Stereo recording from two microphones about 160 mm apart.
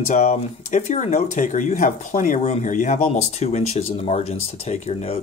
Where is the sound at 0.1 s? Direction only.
50° left (ahead or behind).